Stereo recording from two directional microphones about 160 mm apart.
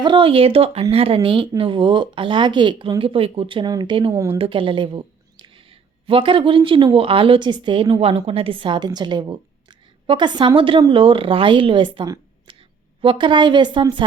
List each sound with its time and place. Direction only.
0.0 s a woman's voice: 30° right (ahead or behind)
4.1 s a woman's voice: 15° right (ahead or behind)
4.4 s a woman's voice: 35° right (ahead or behind)